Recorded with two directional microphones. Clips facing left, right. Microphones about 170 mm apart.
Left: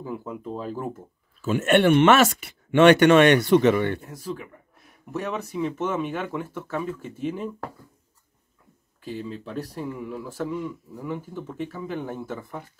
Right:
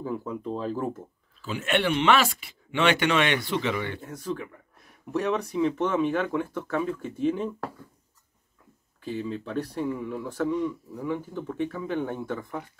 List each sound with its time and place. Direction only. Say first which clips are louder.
0.0 s speech: right 2 dB; 10° left (ahead or behind)
1.4 s speech: left 7 dB; 45° left (ahead or behind)
5.1 s speech: right 3 dB; 5° left (ahead or behind)
9.4 s speech: right 3 dB; 5° left (ahead or behind)